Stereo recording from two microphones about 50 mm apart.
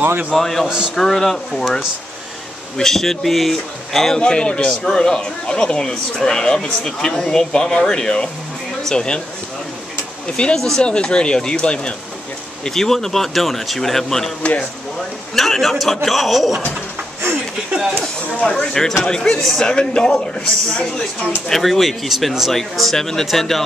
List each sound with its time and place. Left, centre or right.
0.3 s speech: centre
0.7 s a man's voice: centre
0.9 s speech: centre
2.8 s speech: centre
4.2 s speech: centre
10.3 s speech: centre
12.6 s speech: centre
15.3 s speech: centre
18.3 s speech: left
18.7 s speech: centre
22.5 s speech: centre